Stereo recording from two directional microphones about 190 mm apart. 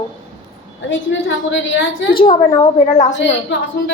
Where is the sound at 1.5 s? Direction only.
75° left (ahead or behind).